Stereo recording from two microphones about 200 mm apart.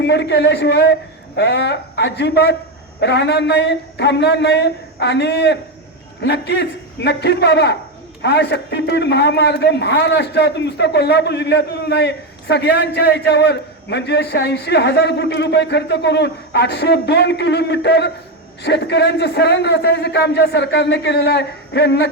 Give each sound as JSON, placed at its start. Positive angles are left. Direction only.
{"t": 0.0, "sound": "a man's voice", "side_deg": 60}